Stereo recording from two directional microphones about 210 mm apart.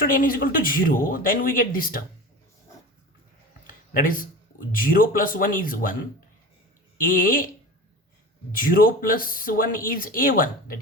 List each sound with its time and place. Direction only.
0.0 s speech: 40° left (ahead or behind)
4.0 s speech: 40° left (ahead or behind)
7.0 s speech: 40° left (ahead or behind)
8.5 s speech: 40° left (ahead or behind)